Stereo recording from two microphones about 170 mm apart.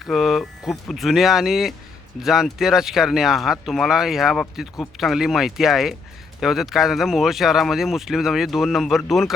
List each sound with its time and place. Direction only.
0.0 s speech: centre (ahead or behind)